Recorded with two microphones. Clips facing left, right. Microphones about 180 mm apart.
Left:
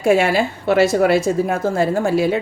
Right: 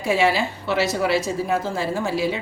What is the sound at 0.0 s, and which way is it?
A woman's voice, 50° left (ahead or behind).